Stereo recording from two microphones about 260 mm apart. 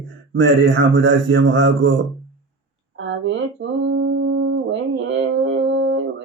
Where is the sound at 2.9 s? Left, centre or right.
Right.